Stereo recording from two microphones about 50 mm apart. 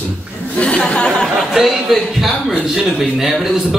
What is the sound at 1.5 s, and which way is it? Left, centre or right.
A man's voice, centre.